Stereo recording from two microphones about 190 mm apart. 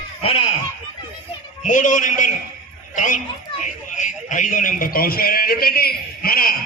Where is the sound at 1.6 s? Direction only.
40° left (ahead or behind).